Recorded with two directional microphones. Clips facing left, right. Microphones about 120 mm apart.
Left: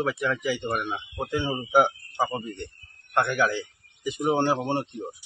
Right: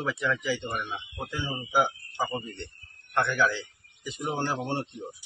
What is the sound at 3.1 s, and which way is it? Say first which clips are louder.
A man's voice: left 2 dB; 50° left (ahead or behind).